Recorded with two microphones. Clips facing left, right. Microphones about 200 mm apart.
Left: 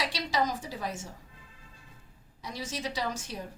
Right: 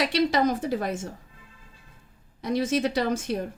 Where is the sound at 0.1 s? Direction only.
55° right (ahead or behind).